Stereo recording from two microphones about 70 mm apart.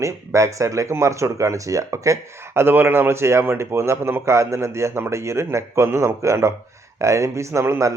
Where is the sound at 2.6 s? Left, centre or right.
Right.